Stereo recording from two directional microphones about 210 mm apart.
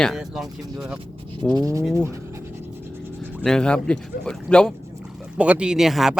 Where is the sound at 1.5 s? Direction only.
15° right (ahead or behind).